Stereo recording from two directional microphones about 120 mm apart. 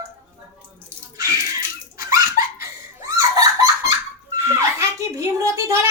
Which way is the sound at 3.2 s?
30° right (ahead or behind).